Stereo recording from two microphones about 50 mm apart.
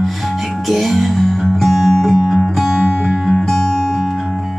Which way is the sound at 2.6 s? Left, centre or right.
Centre.